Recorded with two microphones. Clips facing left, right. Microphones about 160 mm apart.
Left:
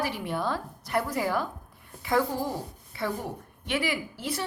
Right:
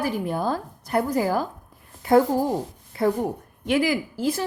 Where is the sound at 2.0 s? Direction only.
45° right (ahead or behind).